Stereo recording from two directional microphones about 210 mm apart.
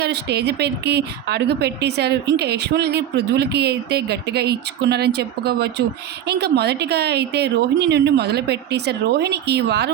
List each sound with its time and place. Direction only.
0.0 s a woman's voice: 55° right (ahead or behind)